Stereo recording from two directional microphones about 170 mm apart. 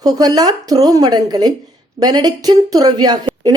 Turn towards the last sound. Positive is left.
turn(degrees=-25)  # may be behind; listen again after turning